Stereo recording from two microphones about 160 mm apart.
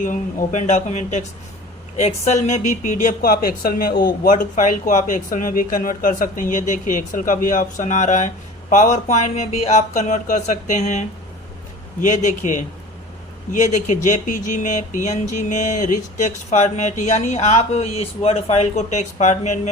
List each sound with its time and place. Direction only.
0.0 s speech: 55° left (ahead or behind)
12.0 s speech: 50° left (ahead or behind)